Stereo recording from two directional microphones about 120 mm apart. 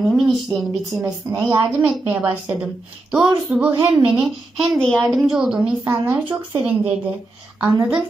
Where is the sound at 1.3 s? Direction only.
15° right (ahead or behind).